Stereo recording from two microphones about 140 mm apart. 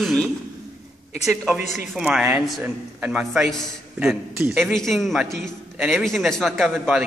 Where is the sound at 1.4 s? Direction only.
5° right (ahead or behind).